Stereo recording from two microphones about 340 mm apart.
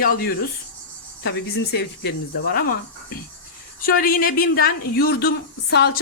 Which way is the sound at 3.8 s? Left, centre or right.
Left.